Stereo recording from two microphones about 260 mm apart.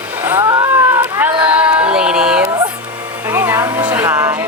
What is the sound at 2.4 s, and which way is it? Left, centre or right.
A woman's voice, centre.